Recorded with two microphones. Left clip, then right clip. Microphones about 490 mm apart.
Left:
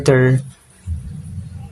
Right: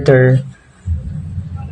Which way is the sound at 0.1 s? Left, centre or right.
Left.